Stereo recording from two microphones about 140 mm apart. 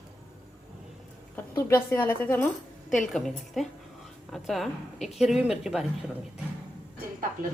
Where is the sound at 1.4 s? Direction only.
15° left (ahead or behind).